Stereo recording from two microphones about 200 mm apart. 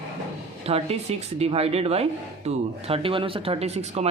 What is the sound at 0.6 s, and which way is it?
Speech, 30° right (ahead or behind).